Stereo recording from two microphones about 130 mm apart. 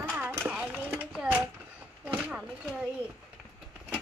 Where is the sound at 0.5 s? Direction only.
10° right (ahead or behind).